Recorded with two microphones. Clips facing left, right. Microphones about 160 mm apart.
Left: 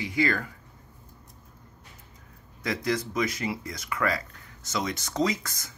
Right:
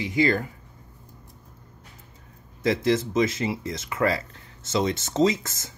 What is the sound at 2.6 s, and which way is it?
Speech, 25° right (ahead or behind).